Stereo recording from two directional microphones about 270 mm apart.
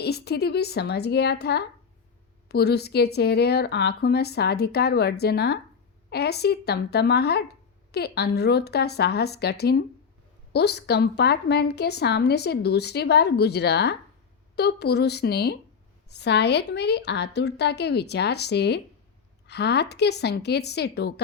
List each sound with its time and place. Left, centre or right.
0.0 s speech: left